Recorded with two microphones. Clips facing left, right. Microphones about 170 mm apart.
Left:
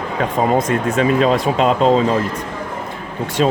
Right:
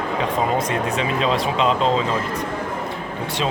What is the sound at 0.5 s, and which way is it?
Speech, 50° left (ahead or behind).